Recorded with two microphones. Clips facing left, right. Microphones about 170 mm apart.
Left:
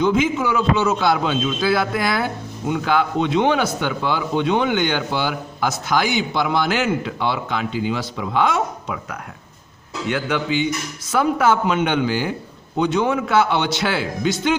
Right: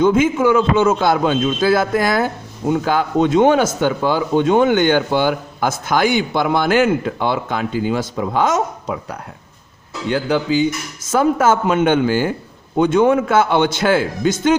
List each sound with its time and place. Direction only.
0.0 s a man's voice: 50° right (ahead or behind)